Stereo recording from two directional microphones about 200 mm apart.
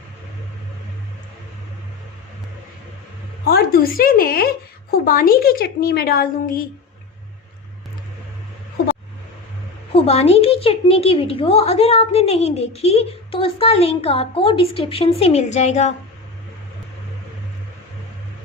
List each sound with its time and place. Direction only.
3.4 s a woman's voice: 50° left (ahead or behind)
9.9 s a woman's voice: 30° left (ahead or behind)